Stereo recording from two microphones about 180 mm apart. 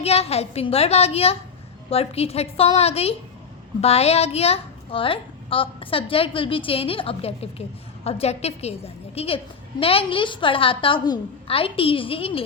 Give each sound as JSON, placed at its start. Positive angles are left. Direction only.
{"t": 0.0, "sound": "a child's voice", "side_deg": 35}